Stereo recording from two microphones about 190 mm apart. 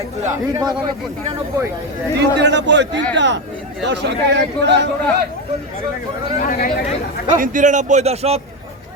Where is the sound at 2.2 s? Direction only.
65° right (ahead or behind).